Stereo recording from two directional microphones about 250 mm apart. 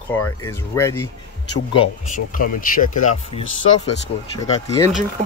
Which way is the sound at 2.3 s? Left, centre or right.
Left.